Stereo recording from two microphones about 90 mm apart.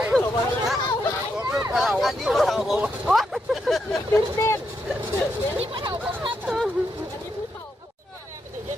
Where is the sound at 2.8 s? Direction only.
5° right (ahead or behind).